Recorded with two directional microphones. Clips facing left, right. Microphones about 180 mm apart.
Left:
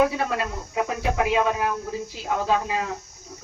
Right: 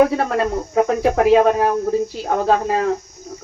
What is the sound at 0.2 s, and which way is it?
Speech, 50° right (ahead or behind).